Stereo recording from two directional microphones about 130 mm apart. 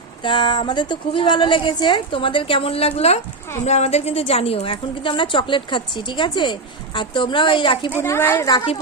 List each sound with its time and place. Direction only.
0.2 s a woman's voice: 35° left (ahead or behind)
7.9 s speech: 20° left (ahead or behind)